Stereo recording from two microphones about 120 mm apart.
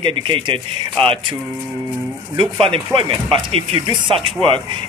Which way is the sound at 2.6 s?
50° right (ahead or behind).